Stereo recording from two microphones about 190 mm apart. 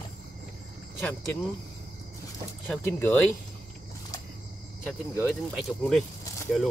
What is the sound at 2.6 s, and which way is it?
Speech, 10° left (ahead or behind).